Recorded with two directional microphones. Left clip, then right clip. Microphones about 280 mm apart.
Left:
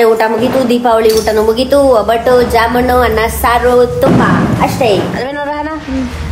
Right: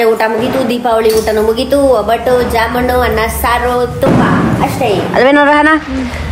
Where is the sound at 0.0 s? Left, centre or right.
Centre.